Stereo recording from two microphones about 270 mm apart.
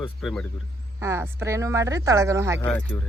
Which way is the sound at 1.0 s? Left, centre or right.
Centre.